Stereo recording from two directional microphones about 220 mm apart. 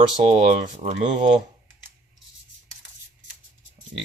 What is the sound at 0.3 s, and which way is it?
Speech, 30° right (ahead or behind).